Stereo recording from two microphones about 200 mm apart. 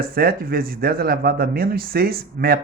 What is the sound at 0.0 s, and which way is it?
A man's voice, 50° right (ahead or behind).